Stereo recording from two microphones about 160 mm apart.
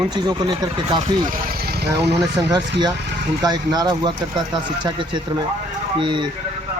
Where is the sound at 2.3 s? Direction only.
25° right (ahead or behind).